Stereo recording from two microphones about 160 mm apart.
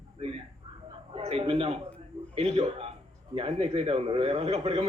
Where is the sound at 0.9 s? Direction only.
40° right (ahead or behind).